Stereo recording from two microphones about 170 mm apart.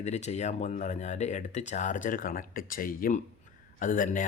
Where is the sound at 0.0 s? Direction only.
40° left (ahead or behind).